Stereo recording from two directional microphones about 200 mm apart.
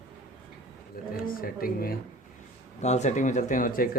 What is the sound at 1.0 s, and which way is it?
Speech, 45° left (ahead or behind).